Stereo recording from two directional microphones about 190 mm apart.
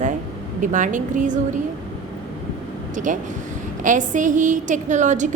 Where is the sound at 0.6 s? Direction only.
45° right (ahead or behind).